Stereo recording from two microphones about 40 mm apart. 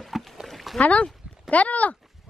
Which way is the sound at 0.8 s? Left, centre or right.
Centre.